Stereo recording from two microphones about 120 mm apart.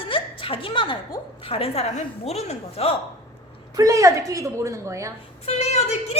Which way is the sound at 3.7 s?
30° right (ahead or behind).